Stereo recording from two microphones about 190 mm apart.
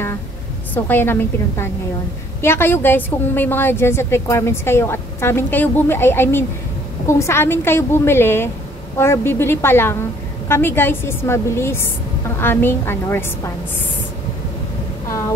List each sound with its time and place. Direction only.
0.8 s a woman's voice: 10° left (ahead or behind)